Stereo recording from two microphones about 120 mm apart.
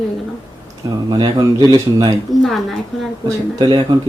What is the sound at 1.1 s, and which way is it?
Speech, 30° right (ahead or behind).